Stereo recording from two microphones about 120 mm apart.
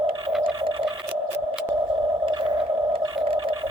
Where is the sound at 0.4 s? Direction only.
45° right (ahead or behind).